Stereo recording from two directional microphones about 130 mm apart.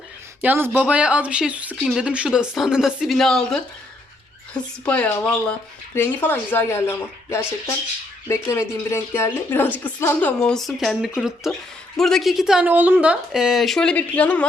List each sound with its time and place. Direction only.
0.4 s speech: 15° right (ahead or behind); by 14.4 s 10° left (ahead or behind)